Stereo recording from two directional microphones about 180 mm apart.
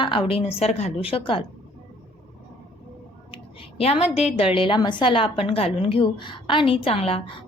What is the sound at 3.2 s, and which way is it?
A woman's voice, 30° left (ahead or behind).